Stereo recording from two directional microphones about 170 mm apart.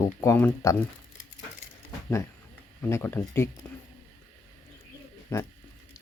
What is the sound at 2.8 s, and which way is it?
Speech, 15° left (ahead or behind).